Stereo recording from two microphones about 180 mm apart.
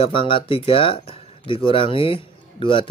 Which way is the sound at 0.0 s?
30° left (ahead or behind).